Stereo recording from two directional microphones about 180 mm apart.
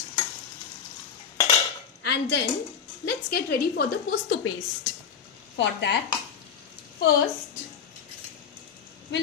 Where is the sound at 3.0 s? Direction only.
60° left (ahead or behind); by 4.5 s 75° left (ahead or behind).